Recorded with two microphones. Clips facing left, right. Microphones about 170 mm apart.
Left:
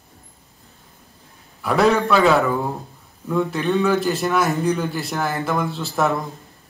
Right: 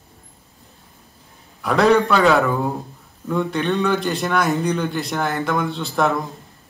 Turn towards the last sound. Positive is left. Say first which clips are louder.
# right 1 dB
turn(degrees=0)  # may be behind; listen again after turning